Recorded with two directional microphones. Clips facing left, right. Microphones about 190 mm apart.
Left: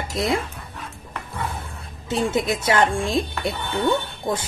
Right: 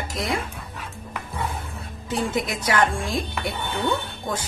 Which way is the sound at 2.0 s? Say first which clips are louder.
Left 3 dB; 25° left (ahead or behind).